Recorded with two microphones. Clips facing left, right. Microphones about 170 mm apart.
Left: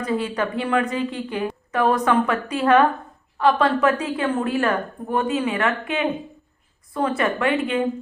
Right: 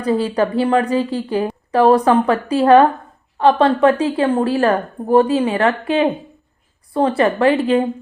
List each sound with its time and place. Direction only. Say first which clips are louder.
0.0 s a woman's voice: right 6 dB; 30° right (ahead or behind)